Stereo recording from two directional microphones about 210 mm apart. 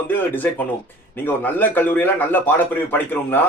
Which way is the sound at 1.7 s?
10° left (ahead or behind).